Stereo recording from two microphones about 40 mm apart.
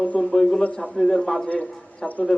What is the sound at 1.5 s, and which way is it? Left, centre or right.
Speech, left.